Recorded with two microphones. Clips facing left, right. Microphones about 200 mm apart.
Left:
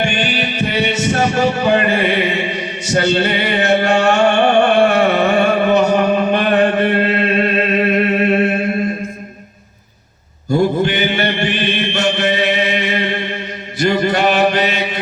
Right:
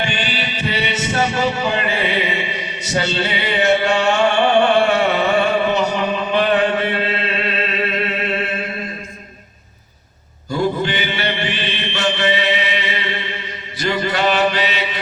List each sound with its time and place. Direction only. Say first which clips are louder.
0.0 s music: left 5 dB; 50° left (ahead or behind)
10.5 s mantra: left 5 dB; 50° left (ahead or behind)